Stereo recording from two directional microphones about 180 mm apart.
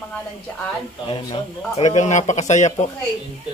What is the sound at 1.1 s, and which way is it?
Speech, 30° left (ahead or behind).